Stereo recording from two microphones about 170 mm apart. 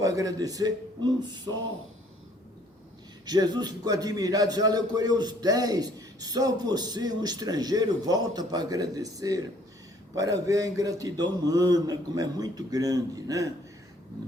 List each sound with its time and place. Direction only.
0.0 s a man's voice: 20° right (ahead or behind)
3.2 s a man's voice: 25° right (ahead or behind)